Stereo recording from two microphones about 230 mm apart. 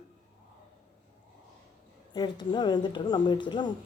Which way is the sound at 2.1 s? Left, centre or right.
Centre.